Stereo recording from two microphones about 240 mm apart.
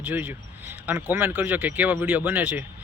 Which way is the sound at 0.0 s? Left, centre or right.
Centre.